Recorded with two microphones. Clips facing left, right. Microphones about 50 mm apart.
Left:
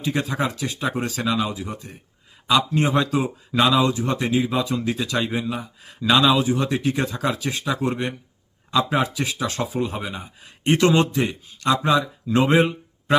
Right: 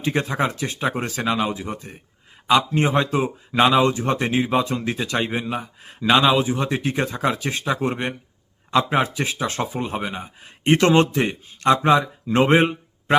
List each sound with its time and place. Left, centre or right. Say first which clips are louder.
0.0 s speech: right 2 dB; right
3.8 s speech: right 1 dB; right